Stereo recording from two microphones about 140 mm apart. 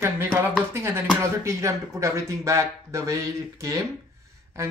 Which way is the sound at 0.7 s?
20° right (ahead or behind).